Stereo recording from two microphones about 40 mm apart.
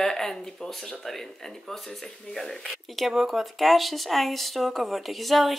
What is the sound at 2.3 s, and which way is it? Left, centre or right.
Speech, centre.